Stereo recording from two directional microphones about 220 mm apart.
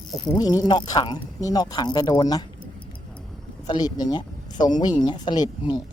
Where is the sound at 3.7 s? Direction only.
20° left (ahead or behind).